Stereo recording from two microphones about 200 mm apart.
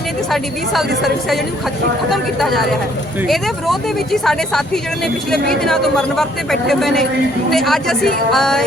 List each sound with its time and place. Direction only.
0.3 s speech: centre (ahead or behind)